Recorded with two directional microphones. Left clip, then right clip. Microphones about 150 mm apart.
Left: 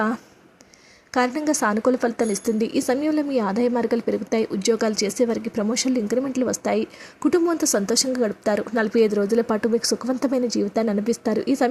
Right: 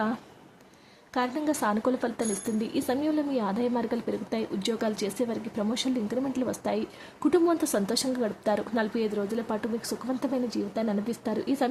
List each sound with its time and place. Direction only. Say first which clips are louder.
1.1 s a woman's voice: left 7 dB; 30° left (ahead or behind)